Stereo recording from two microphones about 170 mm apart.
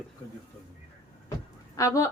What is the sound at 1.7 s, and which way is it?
Speech, 20° left (ahead or behind).